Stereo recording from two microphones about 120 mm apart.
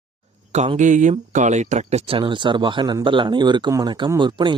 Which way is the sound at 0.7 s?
90° right.